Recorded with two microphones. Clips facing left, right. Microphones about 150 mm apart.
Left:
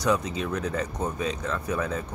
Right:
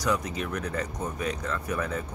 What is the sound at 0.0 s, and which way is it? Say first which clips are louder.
Speech: left 3 dB; 20° left (ahead or behind).